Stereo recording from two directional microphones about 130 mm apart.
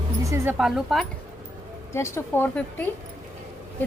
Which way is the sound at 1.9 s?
20° left (ahead or behind).